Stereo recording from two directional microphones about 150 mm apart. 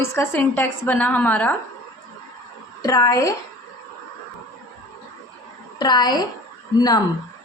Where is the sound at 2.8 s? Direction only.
20° left (ahead or behind).